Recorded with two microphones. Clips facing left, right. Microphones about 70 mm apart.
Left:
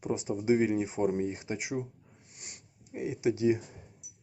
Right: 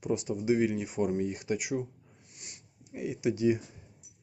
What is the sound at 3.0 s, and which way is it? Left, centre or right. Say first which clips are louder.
Speech: left 1 dB; left.